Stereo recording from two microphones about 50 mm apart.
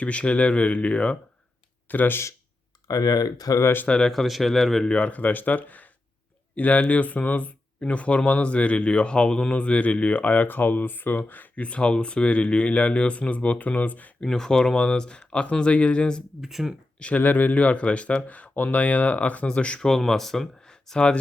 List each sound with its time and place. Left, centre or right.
0.0 s speech: left
1.9 s speech: left
4.0 s speech: centre
4.9 s speech: left
14.2 s speech: centre
16.4 s speech: centre
17.0 s speech: left
19.8 s speech: centre